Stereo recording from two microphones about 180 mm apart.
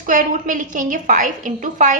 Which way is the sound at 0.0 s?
50° right (ahead or behind).